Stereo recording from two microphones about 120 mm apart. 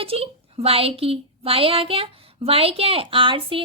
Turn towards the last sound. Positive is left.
turn(degrees=-45)  # may be behind; listen again after turning